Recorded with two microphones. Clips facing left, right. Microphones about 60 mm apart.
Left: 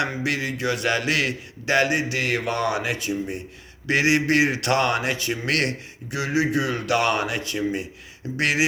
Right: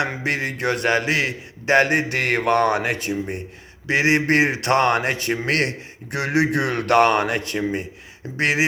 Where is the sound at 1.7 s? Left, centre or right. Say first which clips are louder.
Right 3 dB; right.